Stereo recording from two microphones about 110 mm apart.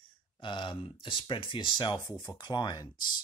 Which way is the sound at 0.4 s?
45° left (ahead or behind).